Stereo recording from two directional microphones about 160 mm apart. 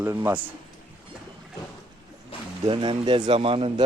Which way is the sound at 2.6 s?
30° right (ahead or behind).